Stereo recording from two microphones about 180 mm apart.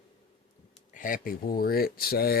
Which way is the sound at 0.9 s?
50° left (ahead or behind).